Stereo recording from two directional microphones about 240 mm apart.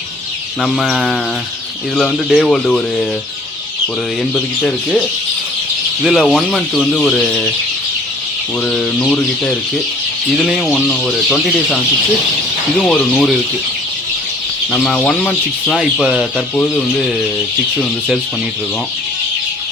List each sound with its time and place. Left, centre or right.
0.6 s speech: centre
4.2 s speech: centre
6.0 s speech: centre
8.6 s speech: centre
12.9 s speech: centre
14.7 s speech: centre